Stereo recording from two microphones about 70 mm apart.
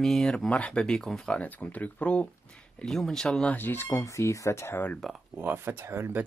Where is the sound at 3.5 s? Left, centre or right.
Left.